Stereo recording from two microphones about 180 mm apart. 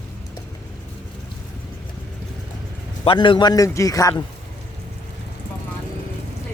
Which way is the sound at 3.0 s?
25° left (ahead or behind).